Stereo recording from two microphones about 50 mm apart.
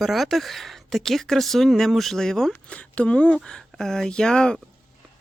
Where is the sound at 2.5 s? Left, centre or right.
Left.